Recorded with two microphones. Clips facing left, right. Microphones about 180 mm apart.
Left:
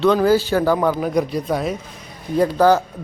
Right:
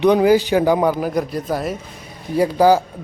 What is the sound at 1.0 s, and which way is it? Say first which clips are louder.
A man's voice: left 1 dB; centre (ahead or behind).